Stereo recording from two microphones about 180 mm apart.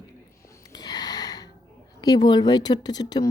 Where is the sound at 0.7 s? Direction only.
20° left (ahead or behind).